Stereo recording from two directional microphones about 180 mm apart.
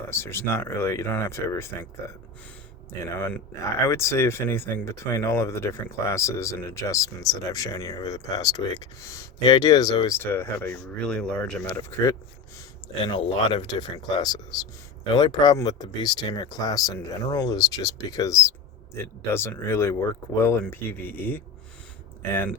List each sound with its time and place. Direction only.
0.1 s speech: 15° left (ahead or behind)
3.2 s speech: 15° left (ahead or behind)
13.1 s speech: 30° left (ahead or behind); by 21.4 s 10° left (ahead or behind)